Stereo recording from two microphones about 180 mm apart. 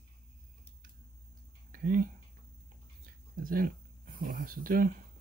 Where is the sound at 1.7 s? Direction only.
50° right (ahead or behind).